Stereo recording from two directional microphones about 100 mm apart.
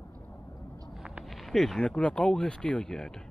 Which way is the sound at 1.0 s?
5° right (ahead or behind).